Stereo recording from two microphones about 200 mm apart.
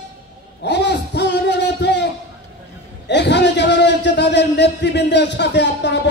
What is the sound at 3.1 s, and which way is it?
A man's voice, 60° left (ahead or behind).